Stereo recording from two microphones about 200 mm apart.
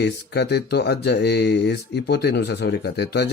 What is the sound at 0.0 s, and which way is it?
Speech, 55° left (ahead or behind).